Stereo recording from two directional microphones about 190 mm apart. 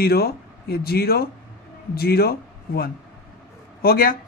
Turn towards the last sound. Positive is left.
turn(degrees=50)  # may be behind; listen again after turning